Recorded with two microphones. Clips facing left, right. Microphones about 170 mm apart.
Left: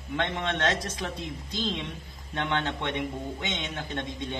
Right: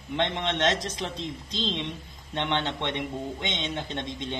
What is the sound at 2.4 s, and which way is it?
A man's voice, 25° right (ahead or behind).